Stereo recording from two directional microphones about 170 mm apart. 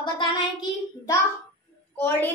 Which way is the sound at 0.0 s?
25° left (ahead or behind).